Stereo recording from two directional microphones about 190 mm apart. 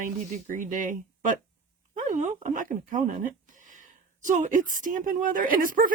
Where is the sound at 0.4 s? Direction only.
45° right (ahead or behind).